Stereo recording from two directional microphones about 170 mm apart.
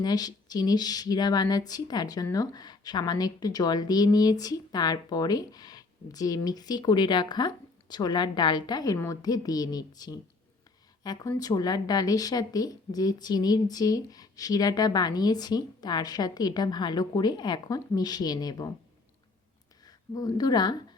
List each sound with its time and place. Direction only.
0.0 s speech: 25° left (ahead or behind)
20.1 s speech: 20° left (ahead or behind)